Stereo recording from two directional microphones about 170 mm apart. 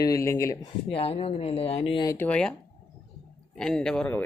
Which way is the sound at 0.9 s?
35° left (ahead or behind).